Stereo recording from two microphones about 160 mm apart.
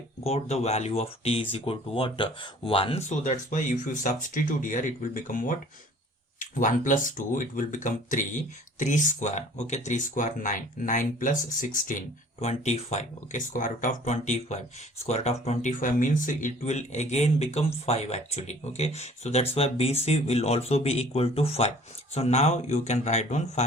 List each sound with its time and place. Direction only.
0.3 s speech: 40° left (ahead or behind)